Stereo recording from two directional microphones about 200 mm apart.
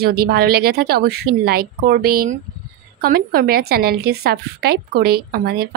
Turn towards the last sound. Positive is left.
turn(degrees=-50)  # may be behind; listen again after turning